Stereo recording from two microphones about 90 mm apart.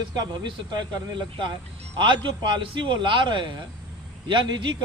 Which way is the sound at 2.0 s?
60° right (ahead or behind).